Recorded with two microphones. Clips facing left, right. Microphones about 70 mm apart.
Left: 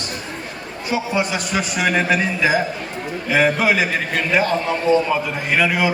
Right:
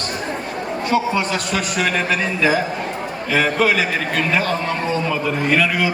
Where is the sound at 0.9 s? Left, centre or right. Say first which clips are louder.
Right 1 dB; centre.